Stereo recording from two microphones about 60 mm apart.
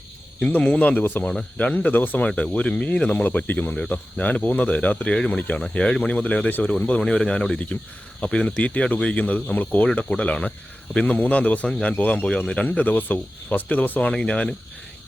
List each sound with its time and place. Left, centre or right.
0.3 s a man's voice: centre
3.2 s a man's voice: left
14.1 s speech: centre